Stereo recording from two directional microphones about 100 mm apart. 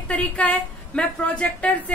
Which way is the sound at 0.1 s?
10° left (ahead or behind).